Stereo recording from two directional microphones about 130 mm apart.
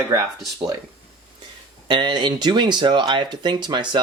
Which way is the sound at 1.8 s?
35° right (ahead or behind).